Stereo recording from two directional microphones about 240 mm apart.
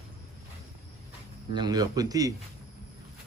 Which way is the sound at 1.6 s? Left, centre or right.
Centre.